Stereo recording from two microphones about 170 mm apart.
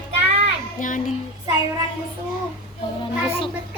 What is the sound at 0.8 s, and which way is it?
Child singing, 50° left (ahead or behind).